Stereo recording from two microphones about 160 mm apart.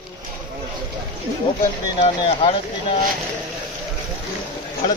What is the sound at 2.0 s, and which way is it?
Speech, 40° left (ahead or behind).